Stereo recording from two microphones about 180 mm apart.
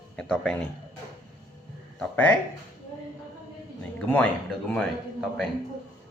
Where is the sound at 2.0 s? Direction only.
10° left (ahead or behind).